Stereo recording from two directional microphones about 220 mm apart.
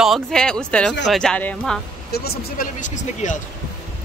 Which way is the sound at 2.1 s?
45° left (ahead or behind).